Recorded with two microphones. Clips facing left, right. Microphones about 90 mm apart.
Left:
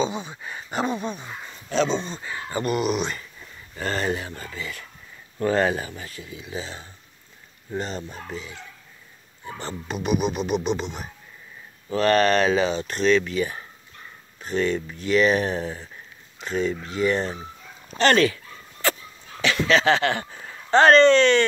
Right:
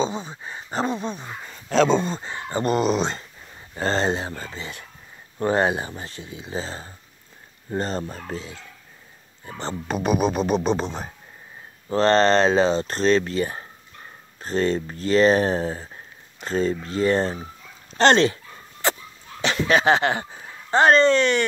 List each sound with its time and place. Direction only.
0.0 s speech: 35° right (ahead or behind)
1.9 s speech: 50° right (ahead or behind)
2.1 s speech: 30° right (ahead or behind)
9.6 s speech: 35° right (ahead or behind)
17.9 s dog: 30° right (ahead or behind)
19.4 s speech: 20° right (ahead or behind)